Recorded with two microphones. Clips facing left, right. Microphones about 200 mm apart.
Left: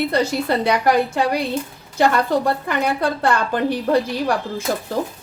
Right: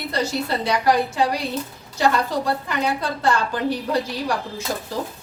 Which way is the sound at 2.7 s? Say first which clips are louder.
Left 4 dB; 55° left (ahead or behind).